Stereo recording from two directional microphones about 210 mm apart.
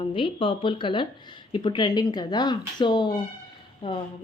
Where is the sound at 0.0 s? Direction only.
25° left (ahead or behind).